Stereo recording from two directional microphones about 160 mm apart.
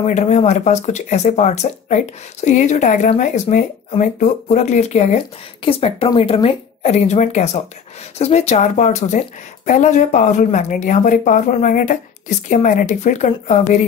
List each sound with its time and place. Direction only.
0.0 s a woman's voice: 45° left (ahead or behind)